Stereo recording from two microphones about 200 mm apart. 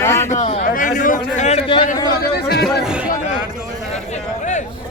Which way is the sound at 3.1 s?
35° left (ahead or behind).